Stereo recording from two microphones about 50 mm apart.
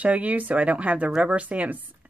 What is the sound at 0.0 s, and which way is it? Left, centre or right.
Speech, right.